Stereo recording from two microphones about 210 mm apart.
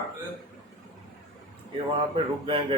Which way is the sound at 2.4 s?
25° right (ahead or behind).